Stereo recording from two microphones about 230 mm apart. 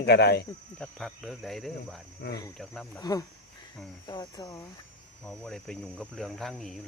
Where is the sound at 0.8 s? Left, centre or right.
Centre.